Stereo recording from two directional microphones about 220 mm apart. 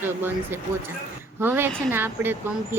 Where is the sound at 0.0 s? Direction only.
10° right (ahead or behind).